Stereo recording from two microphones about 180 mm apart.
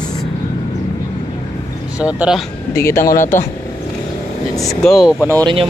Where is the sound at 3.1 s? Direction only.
45° left (ahead or behind).